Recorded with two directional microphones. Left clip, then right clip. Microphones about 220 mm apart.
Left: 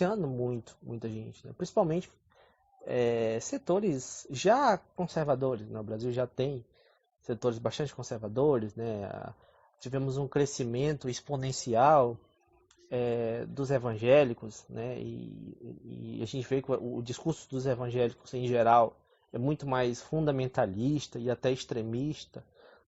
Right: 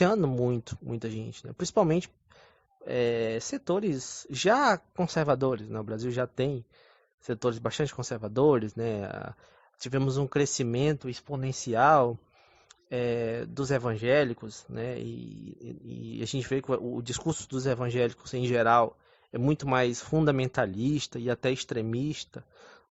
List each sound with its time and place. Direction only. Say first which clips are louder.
0.4 s speech: right 5 dB; 25° right (ahead or behind)